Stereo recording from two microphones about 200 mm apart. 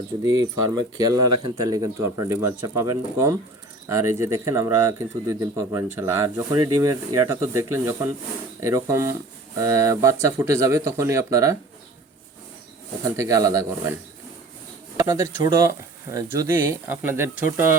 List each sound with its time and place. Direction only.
0.2 s speech: 20° right (ahead or behind)
13.1 s speech: 15° right (ahead or behind)
14.9 s speech: 15° right (ahead or behind)